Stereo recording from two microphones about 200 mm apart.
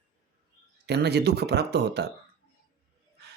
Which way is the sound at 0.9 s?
55° right (ahead or behind).